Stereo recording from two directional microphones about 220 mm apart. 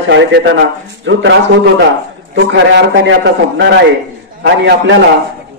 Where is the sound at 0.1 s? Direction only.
55° right (ahead or behind).